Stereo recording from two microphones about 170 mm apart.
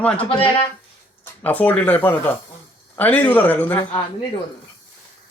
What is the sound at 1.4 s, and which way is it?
A man's voice, 10° left (ahead or behind).